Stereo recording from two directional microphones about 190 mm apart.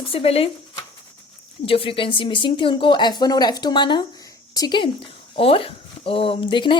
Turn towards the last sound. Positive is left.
turn(degrees=25)  # may be behind; listen again after turning